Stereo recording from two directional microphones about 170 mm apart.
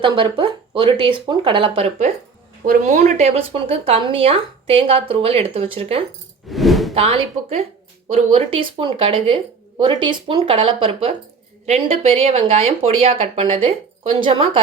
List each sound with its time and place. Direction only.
0.0 s speech: 30° right (ahead or behind)
6.5 s a sound: centre (ahead or behind)
6.9 s speech: 35° right (ahead or behind)